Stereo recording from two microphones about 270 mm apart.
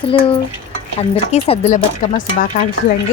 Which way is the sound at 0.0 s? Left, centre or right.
Centre.